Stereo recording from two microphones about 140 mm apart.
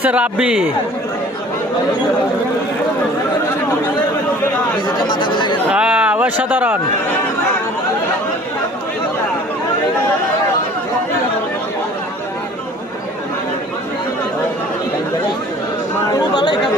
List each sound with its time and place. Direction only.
0.0 s speech: 10° right (ahead or behind)
5.0 s speech: 35° left (ahead or behind)
5.7 s speech: 10° right (ahead or behind)
16.1 s speech: 35° left (ahead or behind)